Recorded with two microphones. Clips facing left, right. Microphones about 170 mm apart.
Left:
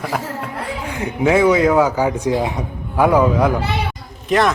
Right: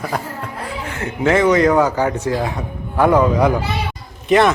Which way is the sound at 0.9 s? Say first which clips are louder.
Left 1 dB; 10° left (ahead or behind).